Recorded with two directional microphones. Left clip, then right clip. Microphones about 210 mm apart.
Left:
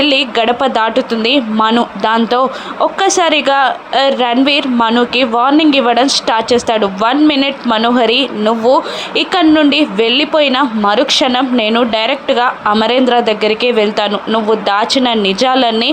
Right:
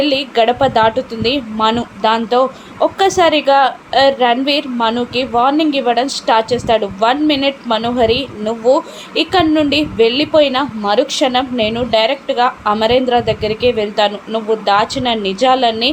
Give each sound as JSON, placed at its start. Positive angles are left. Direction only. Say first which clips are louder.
{"t": 0.0, "sound": "speech", "louder": "left 2 dB", "side_deg": 20}